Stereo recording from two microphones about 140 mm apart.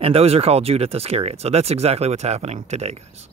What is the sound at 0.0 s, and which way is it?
Speech, 45° right (ahead or behind).